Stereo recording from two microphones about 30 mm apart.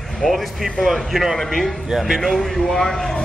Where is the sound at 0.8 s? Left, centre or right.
Centre.